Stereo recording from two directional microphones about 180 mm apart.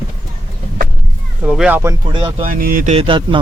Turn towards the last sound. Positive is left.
turn(degrees=-30)  # may be behind; listen again after turning